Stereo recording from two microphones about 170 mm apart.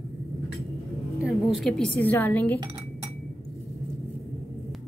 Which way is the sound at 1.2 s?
Centre (ahead or behind).